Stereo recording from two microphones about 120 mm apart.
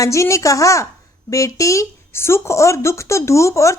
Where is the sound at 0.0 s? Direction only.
25° left (ahead or behind).